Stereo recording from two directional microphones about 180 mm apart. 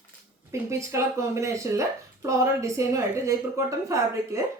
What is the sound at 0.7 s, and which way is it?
Speech, 15° right (ahead or behind).